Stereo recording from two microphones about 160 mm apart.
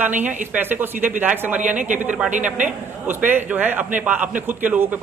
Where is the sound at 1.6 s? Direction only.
50° right (ahead or behind).